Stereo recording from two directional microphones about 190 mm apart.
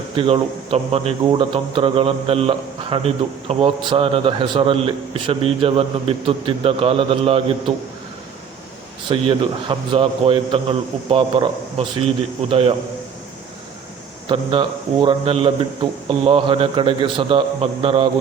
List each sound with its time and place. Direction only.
0.2 s a man's voice: 30° right (ahead or behind)
9.0 s a man's voice: 25° right (ahead or behind)
14.3 s a man's voice: 25° right (ahead or behind)